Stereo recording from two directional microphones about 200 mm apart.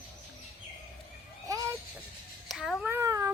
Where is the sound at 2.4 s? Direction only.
Centre (ahead or behind).